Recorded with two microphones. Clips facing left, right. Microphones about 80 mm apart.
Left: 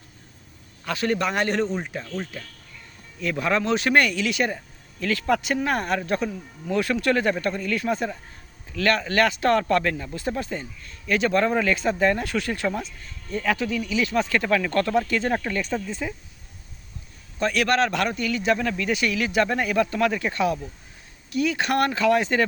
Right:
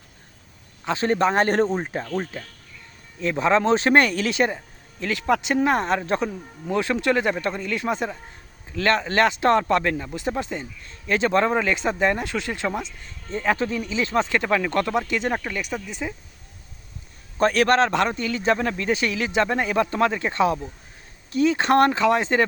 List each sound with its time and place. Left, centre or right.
0.9 s speech: right
3.2 s speech: right
15.4 s speech: centre
17.3 s speech: right